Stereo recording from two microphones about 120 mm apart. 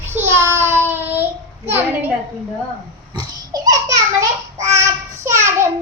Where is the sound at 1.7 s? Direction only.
15° right (ahead or behind).